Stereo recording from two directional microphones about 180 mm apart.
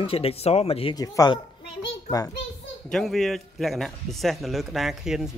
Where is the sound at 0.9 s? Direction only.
20° left (ahead or behind).